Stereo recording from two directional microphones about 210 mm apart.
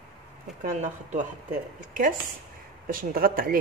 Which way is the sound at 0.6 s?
35° right (ahead or behind).